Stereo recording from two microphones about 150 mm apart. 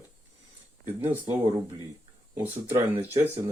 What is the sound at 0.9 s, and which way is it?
Speech, 15° right (ahead or behind).